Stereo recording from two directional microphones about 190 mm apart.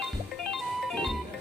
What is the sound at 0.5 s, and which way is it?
Music, centre (ahead or behind).